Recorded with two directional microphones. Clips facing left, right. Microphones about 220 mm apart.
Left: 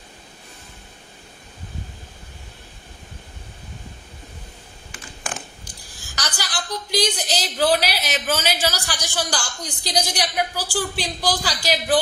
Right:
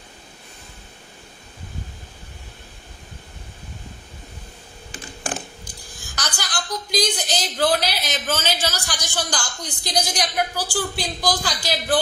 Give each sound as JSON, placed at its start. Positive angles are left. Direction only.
{"t": 4.9, "sound": "typing", "side_deg": -35}
{"t": 6.3, "sound": "a woman's voice", "side_deg": 10}